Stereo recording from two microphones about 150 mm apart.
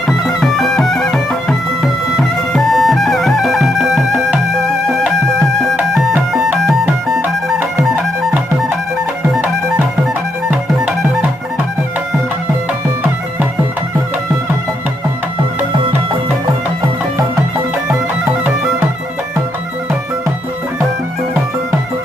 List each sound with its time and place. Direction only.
0.1 s music: centre (ahead or behind)
5.7 s music: centre (ahead or behind)
10.5 s music: 10° right (ahead or behind)
17.8 s music: 15° right (ahead or behind)